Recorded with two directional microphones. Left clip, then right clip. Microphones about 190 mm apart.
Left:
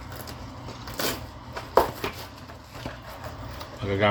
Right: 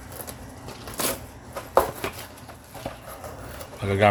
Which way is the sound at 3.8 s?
50° right (ahead or behind).